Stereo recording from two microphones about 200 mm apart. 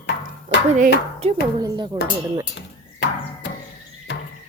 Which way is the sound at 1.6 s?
20° right (ahead or behind).